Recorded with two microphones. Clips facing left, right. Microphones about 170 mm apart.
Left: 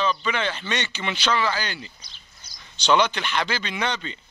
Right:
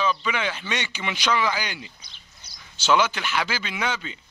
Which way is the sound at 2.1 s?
65° right (ahead or behind).